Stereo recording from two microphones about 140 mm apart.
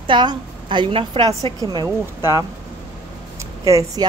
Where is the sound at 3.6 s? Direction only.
25° right (ahead or behind).